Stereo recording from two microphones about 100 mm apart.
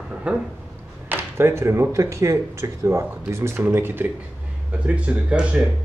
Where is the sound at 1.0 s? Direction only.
20° right (ahead or behind).